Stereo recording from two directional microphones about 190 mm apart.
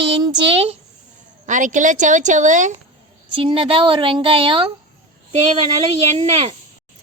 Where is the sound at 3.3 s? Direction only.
30° right (ahead or behind).